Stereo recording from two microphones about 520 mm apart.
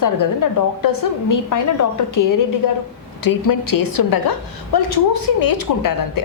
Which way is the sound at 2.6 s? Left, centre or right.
Left.